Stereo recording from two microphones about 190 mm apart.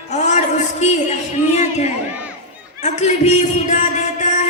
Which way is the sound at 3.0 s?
35° left (ahead or behind).